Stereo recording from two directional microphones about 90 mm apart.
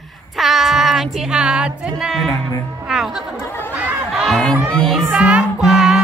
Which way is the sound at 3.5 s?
25° left (ahead or behind).